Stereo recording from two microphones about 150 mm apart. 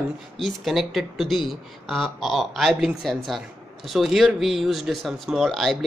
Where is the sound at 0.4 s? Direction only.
Centre (ahead or behind).